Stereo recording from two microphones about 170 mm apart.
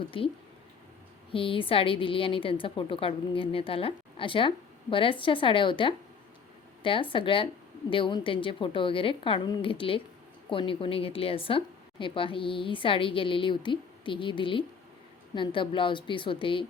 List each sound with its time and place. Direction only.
0.1 s a woman's voice: 30° left (ahead or behind)